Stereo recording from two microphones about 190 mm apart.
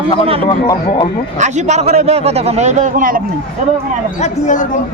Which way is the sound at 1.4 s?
35° right (ahead or behind).